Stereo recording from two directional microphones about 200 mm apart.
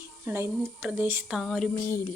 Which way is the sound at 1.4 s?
Centre (ahead or behind).